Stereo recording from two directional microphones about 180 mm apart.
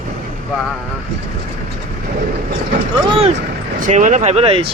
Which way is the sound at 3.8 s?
45° right (ahead or behind).